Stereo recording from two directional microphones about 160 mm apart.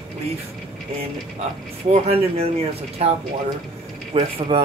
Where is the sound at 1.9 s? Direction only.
40° right (ahead or behind).